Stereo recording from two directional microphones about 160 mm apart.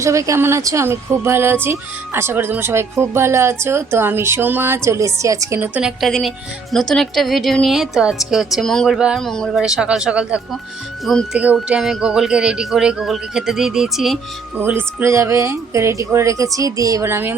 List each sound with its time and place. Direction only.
0.0 s speech: 20° right (ahead or behind)
5.5 s speech: 10° right (ahead or behind)
11.3 s speech: 5° right (ahead or behind)
14.6 s speech: 10° right (ahead or behind)